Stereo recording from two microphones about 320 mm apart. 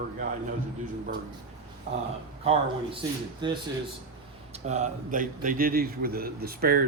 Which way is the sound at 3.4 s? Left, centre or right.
Centre.